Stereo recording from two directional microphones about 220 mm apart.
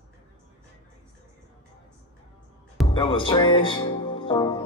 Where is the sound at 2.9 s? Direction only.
20° left (ahead or behind).